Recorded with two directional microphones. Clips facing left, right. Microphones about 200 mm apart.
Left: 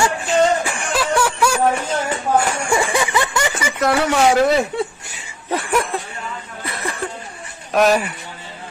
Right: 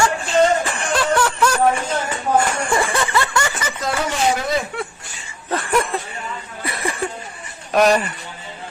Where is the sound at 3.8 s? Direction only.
70° left (ahead or behind).